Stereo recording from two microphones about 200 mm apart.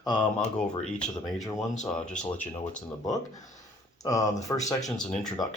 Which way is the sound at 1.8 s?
5° left (ahead or behind).